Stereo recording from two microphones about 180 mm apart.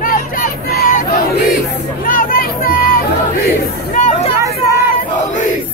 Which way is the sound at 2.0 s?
50° left (ahead or behind).